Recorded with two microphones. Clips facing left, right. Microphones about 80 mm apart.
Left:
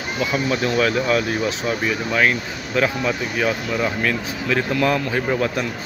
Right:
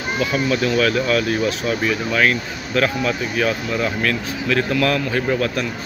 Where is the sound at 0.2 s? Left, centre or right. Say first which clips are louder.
Right 1 dB; left.